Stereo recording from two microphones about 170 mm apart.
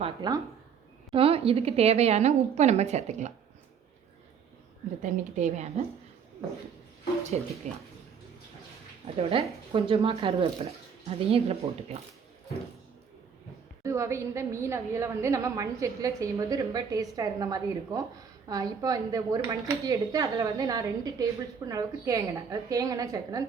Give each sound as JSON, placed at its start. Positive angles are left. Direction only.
{"t": 0.0, "sound": "a woman's voice", "side_deg": -25}
{"t": 5.0, "sound": "a woman's voice", "side_deg": -45}
{"t": 7.3, "sound": "speech", "side_deg": -40}
{"t": 9.1, "sound": "speech", "side_deg": -35}
{"t": 13.8, "sound": "a woman's voice", "side_deg": -15}